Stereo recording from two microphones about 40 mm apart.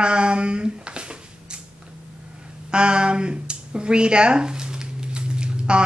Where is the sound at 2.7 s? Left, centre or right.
Right.